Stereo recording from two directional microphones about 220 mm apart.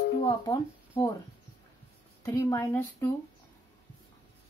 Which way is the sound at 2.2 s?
10° left (ahead or behind).